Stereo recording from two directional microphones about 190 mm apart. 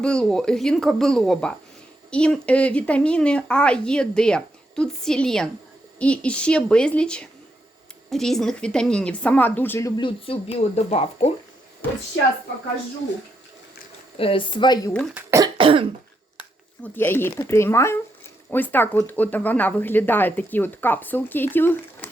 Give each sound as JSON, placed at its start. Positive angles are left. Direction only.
{"t": 0.0, "sound": "speech", "side_deg": 5}
{"t": 10.0, "sound": "speech", "side_deg": 30}
{"t": 14.2, "sound": "speech", "side_deg": 30}
{"t": 15.1, "sound": "speech", "side_deg": -15}
{"t": 15.5, "sound": "cough", "side_deg": -30}
{"t": 16.8, "sound": "speech", "side_deg": 10}